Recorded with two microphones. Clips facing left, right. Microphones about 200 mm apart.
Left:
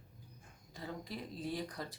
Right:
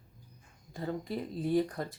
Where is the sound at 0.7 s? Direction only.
50° right (ahead or behind).